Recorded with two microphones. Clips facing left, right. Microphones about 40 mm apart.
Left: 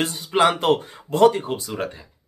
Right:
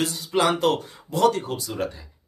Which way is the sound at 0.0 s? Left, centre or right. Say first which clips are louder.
Left 3 dB; left.